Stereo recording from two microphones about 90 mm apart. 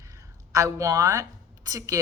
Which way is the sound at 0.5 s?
40° right (ahead or behind).